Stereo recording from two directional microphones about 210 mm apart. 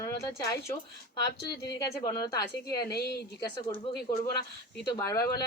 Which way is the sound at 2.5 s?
50° left (ahead or behind).